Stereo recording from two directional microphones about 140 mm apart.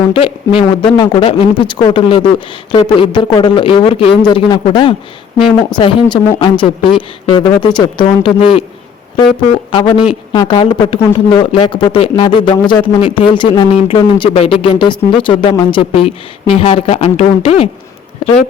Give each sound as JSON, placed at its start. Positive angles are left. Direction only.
{"t": 0.1, "sound": "speech", "side_deg": 40}
{"t": 9.7, "sound": "speech", "side_deg": 35}